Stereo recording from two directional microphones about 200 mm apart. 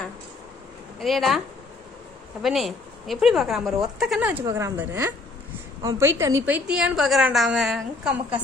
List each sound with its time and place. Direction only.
0.9 s speech: centre (ahead or behind)
2.4 s a woman's voice: centre (ahead or behind)